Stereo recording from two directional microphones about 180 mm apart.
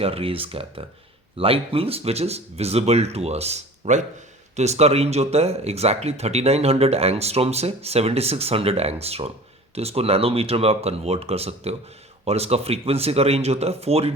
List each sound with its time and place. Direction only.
0.0 s speech: 30° right (ahead or behind)